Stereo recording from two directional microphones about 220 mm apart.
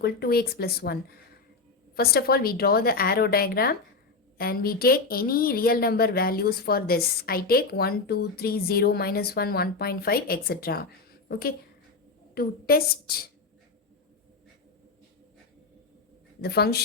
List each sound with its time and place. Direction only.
0.0 s speech: 45° left (ahead or behind)
2.0 s speech: 45° left (ahead or behind)
16.4 s speech: 45° left (ahead or behind)